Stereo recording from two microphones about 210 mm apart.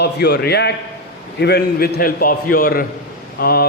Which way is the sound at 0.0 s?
50° left (ahead or behind).